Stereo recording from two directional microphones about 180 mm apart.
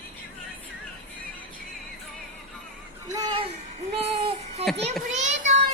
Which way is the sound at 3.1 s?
25° right (ahead or behind).